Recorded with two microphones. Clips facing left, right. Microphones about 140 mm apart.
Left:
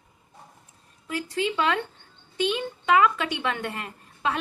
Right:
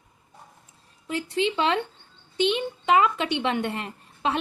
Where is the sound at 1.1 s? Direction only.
25° right (ahead or behind).